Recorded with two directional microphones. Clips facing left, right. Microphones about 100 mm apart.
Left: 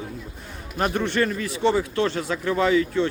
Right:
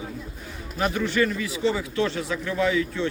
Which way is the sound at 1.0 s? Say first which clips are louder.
Even; 50° left (ahead or behind).